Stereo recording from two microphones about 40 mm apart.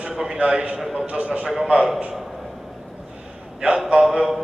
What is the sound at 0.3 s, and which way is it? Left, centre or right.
Speech, right.